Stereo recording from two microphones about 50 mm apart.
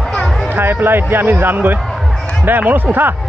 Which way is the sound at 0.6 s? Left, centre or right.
Right.